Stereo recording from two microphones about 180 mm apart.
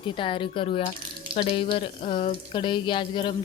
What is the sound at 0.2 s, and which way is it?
Speech, 30° left (ahead or behind).